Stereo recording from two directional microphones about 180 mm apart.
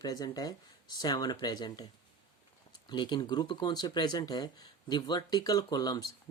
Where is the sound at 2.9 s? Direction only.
25° left (ahead or behind).